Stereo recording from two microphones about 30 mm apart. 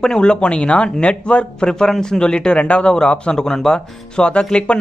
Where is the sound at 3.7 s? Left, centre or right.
Left.